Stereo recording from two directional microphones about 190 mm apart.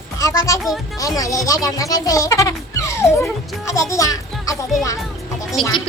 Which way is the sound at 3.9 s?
15° left (ahead or behind).